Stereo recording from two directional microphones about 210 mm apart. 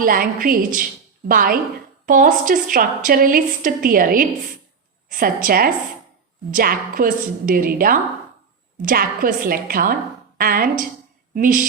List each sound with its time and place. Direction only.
0.0 s a woman's voice: 40° right (ahead or behind)